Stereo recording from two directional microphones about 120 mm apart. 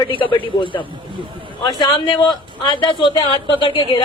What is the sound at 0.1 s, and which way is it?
Speech, 45° left (ahead or behind).